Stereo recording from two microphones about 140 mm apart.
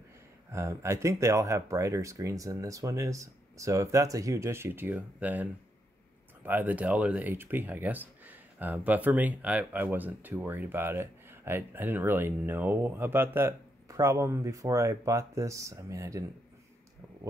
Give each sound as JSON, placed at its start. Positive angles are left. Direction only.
{"t": 0.5, "sound": "speech", "side_deg": -20}